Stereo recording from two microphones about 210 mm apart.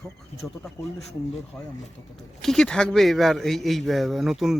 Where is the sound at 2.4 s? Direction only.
Centre (ahead or behind).